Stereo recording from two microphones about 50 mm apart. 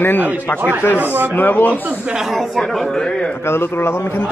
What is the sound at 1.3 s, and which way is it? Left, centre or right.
Speech, left.